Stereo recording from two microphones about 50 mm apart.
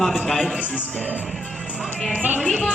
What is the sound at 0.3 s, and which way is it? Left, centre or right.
Speech, centre.